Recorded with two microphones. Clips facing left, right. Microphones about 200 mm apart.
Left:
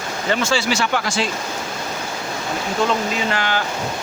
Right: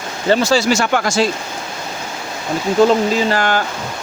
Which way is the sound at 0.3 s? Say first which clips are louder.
Right 6 dB; 35° right (ahead or behind).